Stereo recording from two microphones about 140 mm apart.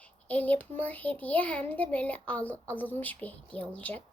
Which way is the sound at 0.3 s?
10° left (ahead or behind).